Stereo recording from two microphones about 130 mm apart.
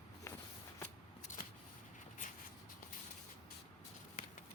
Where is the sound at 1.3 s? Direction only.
70° left (ahead or behind).